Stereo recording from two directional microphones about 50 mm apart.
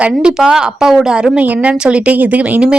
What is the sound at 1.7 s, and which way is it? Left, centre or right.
Speech, right.